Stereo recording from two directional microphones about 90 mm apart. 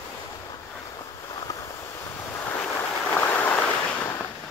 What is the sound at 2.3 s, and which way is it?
Waves, 25° left (ahead or behind).